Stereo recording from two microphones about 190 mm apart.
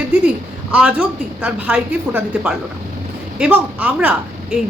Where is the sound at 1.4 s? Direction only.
10° right (ahead or behind).